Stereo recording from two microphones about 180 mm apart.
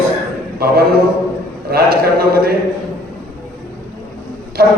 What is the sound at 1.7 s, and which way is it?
Speech, 60° right (ahead or behind).